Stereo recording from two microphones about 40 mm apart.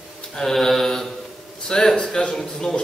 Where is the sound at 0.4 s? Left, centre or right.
Centre.